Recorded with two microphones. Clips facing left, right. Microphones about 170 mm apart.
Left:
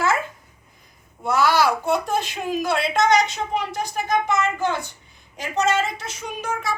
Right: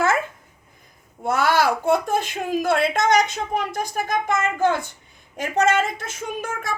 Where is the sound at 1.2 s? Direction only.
50° right (ahead or behind).